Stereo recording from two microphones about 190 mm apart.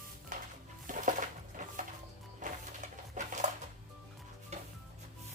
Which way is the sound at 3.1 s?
40° right (ahead or behind).